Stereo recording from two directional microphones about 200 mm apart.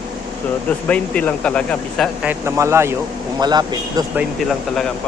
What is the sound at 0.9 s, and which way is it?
Speech, 5° left (ahead or behind).